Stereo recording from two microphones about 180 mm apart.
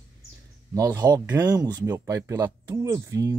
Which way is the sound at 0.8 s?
20° right (ahead or behind).